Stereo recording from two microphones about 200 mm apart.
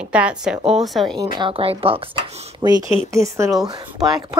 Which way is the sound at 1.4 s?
25° right (ahead or behind).